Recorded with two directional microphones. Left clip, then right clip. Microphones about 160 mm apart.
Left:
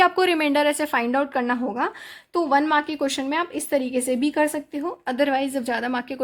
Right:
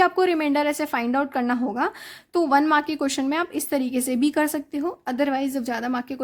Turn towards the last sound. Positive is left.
turn(degrees=-30)  # may be behind; listen again after turning